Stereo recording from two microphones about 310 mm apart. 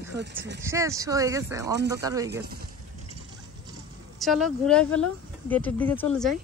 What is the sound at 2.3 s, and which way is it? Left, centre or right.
Speech, right.